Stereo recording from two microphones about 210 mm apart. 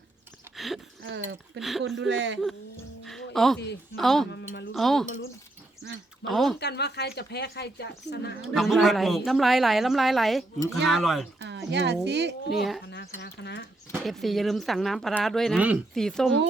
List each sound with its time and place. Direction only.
0.5 s a sound: centre (ahead or behind)
1.0 s speech: 60° right (ahead or behind)
1.5 s speech: centre (ahead or behind)
2.0 s speech: 60° right (ahead or behind)
3.0 s music: centre (ahead or behind)
3.9 s speech: centre (ahead or behind)
4.3 s speech: 55° left (ahead or behind)
4.7 s speech: centre (ahead or behind)
6.2 s speech: centre (ahead or behind)
6.6 s a woman's voice: 55° left (ahead or behind)
8.4 s speech: centre (ahead or behind)
11.3 s speech: 55° right (ahead or behind)
12.9 s speech: 55° left (ahead or behind)
14.0 s speech: centre (ahead or behind)